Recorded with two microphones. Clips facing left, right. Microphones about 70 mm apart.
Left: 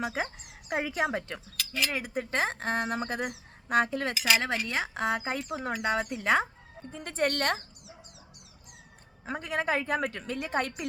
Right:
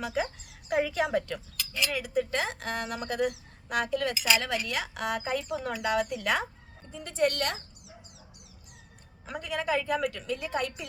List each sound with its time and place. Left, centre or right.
0.0 s speech: left
6.9 s speech: left
9.2 s speech: left